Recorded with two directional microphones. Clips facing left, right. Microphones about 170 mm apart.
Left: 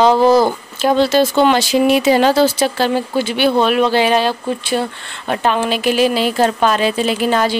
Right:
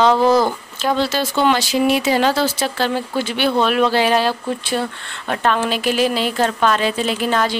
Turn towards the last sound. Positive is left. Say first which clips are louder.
# left 3 dB
turn(degrees=10)  # may be behind; listen again after turning